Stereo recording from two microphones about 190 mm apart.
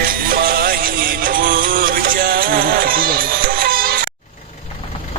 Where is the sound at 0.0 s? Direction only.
50° right (ahead or behind).